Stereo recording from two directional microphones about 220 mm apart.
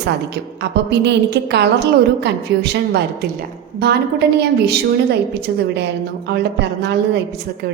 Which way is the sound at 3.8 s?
50° right (ahead or behind).